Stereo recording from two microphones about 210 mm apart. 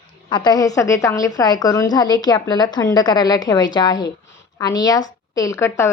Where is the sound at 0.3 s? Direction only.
20° left (ahead or behind).